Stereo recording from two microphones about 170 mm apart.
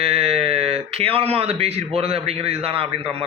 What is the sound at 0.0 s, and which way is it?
Speech, 35° right (ahead or behind).